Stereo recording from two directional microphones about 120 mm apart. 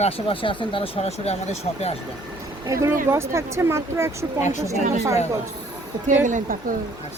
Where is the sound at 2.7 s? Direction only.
25° right (ahead or behind).